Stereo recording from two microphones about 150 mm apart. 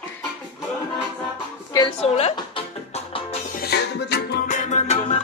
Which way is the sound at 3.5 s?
90° left.